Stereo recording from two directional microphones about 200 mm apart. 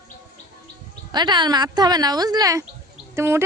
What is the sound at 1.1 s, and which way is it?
A woman's voice, 20° right (ahead or behind).